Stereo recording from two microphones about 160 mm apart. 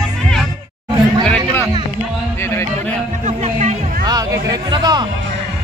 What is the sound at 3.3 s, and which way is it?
Music, 45° right (ahead or behind).